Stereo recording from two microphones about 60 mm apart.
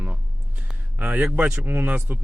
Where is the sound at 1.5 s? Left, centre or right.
Right.